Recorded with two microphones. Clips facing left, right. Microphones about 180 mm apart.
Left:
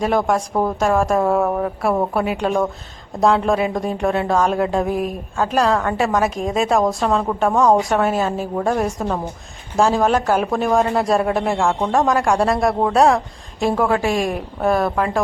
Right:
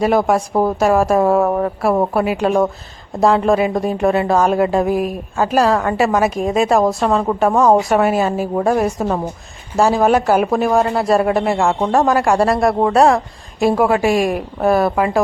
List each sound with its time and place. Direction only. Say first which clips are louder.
0.0 s a woman's voice: right 3 dB; 5° right (ahead or behind)